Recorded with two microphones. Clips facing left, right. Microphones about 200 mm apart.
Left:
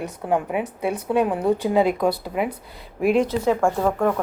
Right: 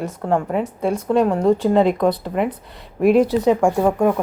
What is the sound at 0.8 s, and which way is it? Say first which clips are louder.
A woman's voice: right 4 dB; 5° left (ahead or behind).